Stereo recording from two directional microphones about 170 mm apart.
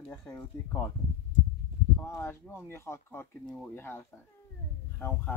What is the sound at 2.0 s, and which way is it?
Speech, 15° left (ahead or behind).